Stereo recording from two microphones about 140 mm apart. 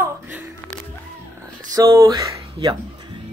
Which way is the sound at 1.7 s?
25° right (ahead or behind).